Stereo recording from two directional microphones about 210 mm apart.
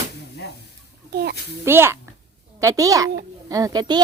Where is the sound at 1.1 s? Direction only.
50° right (ahead or behind).